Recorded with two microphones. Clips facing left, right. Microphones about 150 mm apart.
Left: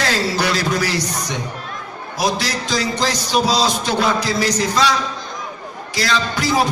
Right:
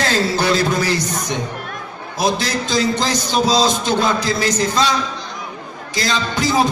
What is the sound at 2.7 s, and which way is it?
Music, 25° right (ahead or behind).